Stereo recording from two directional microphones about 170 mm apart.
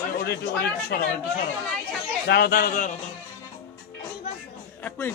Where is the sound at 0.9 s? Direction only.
65° left (ahead or behind).